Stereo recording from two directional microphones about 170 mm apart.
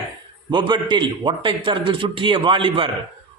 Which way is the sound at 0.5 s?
25° right (ahead or behind).